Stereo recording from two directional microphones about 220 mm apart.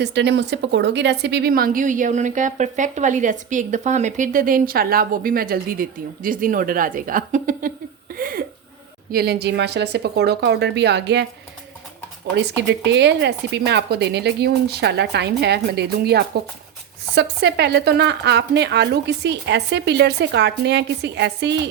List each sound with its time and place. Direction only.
0.0 s a woman's voice: 50° right (ahead or behind)
8.2 s a sound: 40° right (ahead or behind)
9.1 s a woman's voice: 45° right (ahead or behind)
12.4 s a woman's voice: 50° right (ahead or behind)